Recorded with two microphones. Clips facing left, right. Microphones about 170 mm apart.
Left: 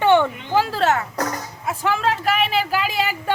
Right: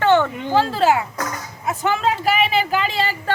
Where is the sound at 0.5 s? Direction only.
10° left (ahead or behind).